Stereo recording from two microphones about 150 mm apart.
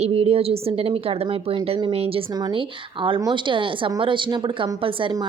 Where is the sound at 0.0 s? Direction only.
40° right (ahead or behind).